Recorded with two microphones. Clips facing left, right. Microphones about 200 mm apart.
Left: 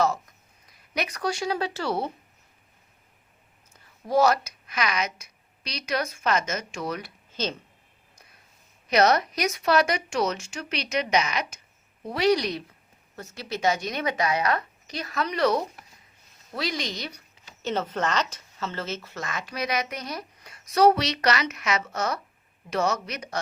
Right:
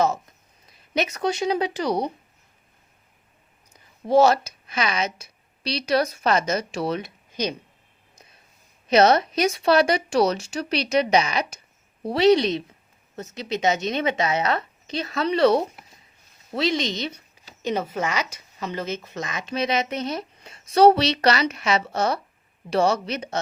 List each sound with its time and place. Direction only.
0.9 s a woman's voice: 25° right (ahead or behind)
4.0 s a woman's voice: 25° right (ahead or behind)
7.3 s a sound: 15° right (ahead or behind)
8.9 s a woman's voice: 25° right (ahead or behind)